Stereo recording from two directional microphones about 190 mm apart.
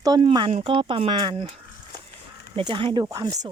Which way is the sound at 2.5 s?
25° right (ahead or behind).